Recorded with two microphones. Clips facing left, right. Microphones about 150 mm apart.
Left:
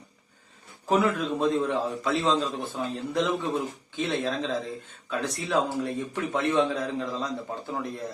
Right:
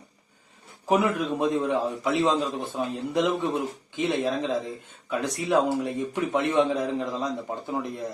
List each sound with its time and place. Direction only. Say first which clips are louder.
0.9 s a man's voice: right 1 dB; 15° right (ahead or behind)